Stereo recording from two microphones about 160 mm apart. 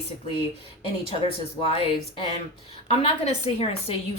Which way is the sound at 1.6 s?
35° left (ahead or behind).